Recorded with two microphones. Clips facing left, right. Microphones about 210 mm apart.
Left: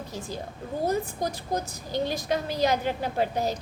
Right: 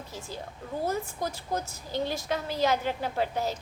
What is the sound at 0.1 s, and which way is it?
A woman's voice, 15° left (ahead or behind).